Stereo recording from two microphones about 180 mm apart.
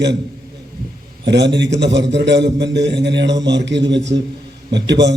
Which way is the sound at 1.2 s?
70° right (ahead or behind).